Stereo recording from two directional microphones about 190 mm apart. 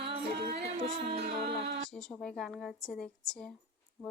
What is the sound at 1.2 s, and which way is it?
Music, 55° right (ahead or behind).